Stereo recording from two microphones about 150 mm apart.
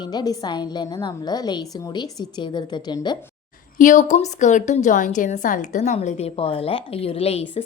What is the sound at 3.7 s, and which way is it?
A woman's voice, 60° left (ahead or behind).